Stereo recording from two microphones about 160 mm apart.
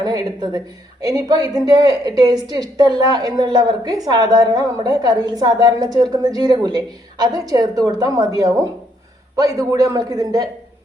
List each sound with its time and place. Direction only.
0.0 s a woman's voice: 25° right (ahead or behind)